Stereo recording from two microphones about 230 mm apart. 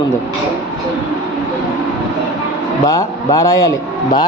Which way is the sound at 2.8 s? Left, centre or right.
Centre.